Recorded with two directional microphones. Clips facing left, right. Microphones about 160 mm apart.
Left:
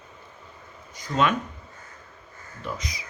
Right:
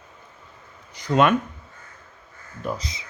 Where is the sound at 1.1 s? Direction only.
60° right (ahead or behind).